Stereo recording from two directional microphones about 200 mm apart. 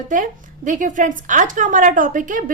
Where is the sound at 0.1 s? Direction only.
40° right (ahead or behind).